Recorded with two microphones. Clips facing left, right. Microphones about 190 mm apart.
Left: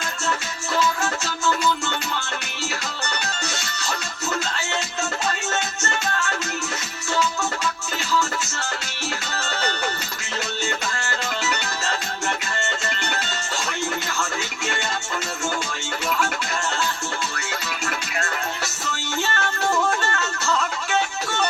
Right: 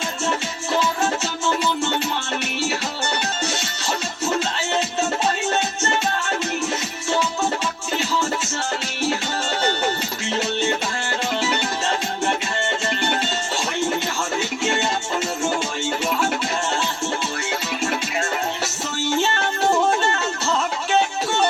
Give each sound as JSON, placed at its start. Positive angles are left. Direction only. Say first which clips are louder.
{"t": 0.8, "sound": "music", "louder": "right 1 dB", "side_deg": -25}
{"t": 5.8, "sound": "music", "louder": "right 3 dB", "side_deg": -30}
{"t": 19.3, "sound": "music", "louder": "right 3 dB", "side_deg": -25}